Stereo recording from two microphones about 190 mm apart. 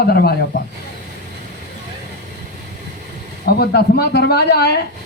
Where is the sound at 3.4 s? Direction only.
60° left (ahead or behind).